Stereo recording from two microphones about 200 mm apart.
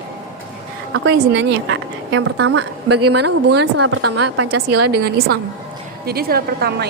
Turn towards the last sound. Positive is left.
turn(degrees=-50)  # may be behind; listen again after turning